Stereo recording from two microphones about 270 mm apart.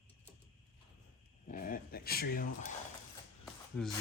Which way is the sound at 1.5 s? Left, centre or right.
Left.